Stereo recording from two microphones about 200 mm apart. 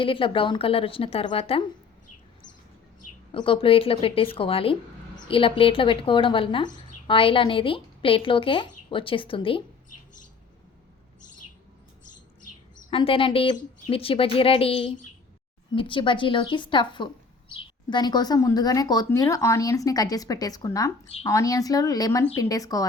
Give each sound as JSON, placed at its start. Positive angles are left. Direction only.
{"t": 0.0, "sound": "speech", "side_deg": 25}
{"t": 3.3, "sound": "a woman's voice", "side_deg": 25}
{"t": 12.9, "sound": "speech", "side_deg": 25}